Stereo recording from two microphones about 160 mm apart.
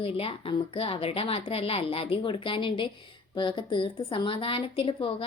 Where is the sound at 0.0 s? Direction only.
35° left (ahead or behind).